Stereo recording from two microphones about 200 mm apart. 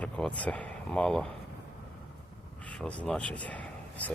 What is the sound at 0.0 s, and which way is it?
Speech, 5° left (ahead or behind).